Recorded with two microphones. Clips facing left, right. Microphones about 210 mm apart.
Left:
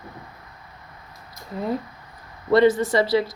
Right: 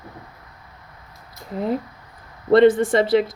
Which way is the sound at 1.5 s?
20° right (ahead or behind).